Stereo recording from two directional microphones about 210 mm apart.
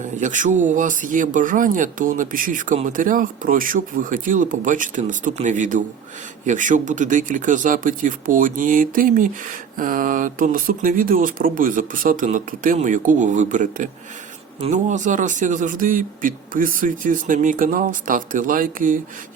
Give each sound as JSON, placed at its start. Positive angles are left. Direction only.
{"t": 0.2, "sound": "speech", "side_deg": -35}